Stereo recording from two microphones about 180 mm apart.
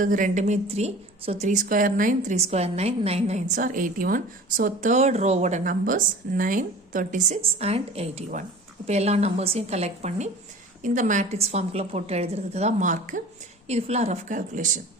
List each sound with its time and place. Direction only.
0.0 s a woman's voice: 50° right (ahead or behind)